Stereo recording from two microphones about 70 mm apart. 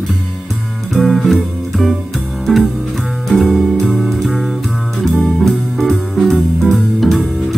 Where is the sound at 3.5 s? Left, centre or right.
Centre.